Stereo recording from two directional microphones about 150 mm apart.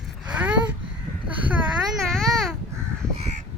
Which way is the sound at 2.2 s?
Centre (ahead or behind).